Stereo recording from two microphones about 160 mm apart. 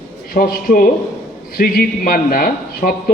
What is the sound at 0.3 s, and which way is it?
A man's voice, 65° left (ahead or behind).